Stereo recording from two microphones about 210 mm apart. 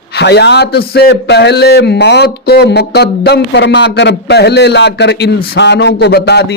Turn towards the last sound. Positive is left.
turn(degrees=50)  # may be behind; listen again after turning